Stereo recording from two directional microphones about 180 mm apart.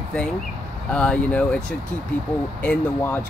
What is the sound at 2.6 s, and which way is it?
Speech, 10° left (ahead or behind).